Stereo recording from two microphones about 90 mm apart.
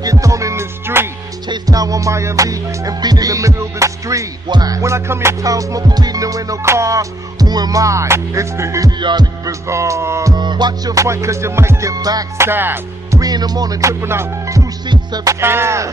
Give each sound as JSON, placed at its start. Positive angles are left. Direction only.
{"t": 0.0, "sound": "music", "side_deg": -40}
{"t": 1.5, "sound": "music", "side_deg": -40}
{"t": 4.5, "sound": "music", "side_deg": -45}
{"t": 9.0, "sound": "music", "side_deg": -50}
{"t": 9.5, "sound": "music", "side_deg": -35}
{"t": 10.3, "sound": "music", "side_deg": -55}
{"t": 12.4, "sound": "music", "side_deg": -25}
{"t": 13.1, "sound": "music", "side_deg": -45}
{"t": 14.9, "sound": "music", "side_deg": -50}
{"t": 15.4, "sound": "music", "side_deg": -30}